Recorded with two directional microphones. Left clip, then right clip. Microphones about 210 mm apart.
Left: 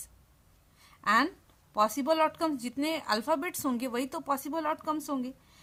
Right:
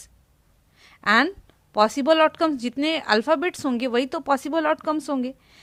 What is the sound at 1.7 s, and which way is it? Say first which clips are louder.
A woman's voice: right 8 dB; 30° right (ahead or behind).